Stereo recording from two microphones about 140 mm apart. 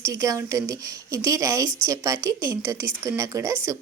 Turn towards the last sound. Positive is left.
turn(degrees=-20)  # may be behind; listen again after turning